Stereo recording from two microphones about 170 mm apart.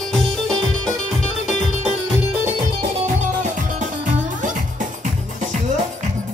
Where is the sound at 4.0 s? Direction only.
50° right (ahead or behind).